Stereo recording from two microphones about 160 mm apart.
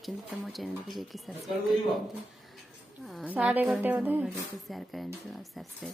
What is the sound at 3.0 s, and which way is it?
Speech, 5° right (ahead or behind).